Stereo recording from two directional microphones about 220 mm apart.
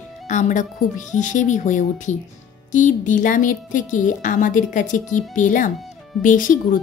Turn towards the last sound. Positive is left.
turn(degrees=35)  # may be behind; listen again after turning